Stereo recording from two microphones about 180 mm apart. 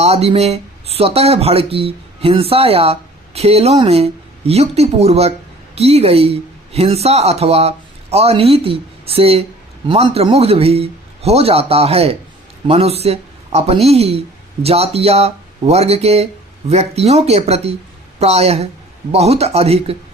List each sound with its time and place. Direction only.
0.0 s a man's voice: 35° right (ahead or behind)